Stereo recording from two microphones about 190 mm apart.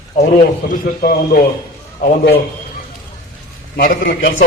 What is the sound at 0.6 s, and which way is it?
A man's voice, 50° left (ahead or behind).